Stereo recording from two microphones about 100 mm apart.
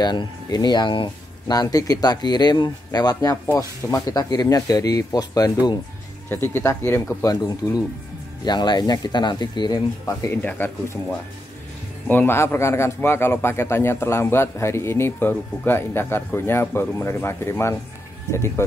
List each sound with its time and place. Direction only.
0.0 s speech: 45° left (ahead or behind)
1.5 s speech: 40° left (ahead or behind)
6.2 s a man's voice: 20° left (ahead or behind)
7.2 s speech: 35° left (ahead or behind)
8.5 s speech: 45° left (ahead or behind)
10.3 s a man's voice: 20° left (ahead or behind)